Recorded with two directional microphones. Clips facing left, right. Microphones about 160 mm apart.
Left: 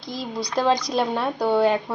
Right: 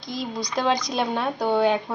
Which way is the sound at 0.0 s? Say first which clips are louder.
Right 1 dB; 35° left (ahead or behind).